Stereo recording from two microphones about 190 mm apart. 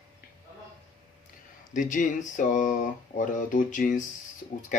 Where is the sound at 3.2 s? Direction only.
45° left (ahead or behind).